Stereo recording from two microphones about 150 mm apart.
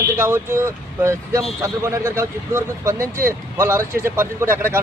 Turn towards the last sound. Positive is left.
turn(degrees=-15)  # may be behind; listen again after turning